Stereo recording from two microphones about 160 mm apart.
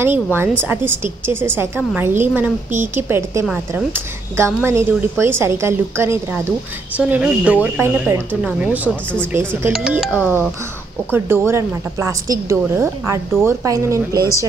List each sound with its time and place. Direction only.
0.0 s a woman's voice: 15° right (ahead or behind)
11.1 s a woman's voice: 15° right (ahead or behind)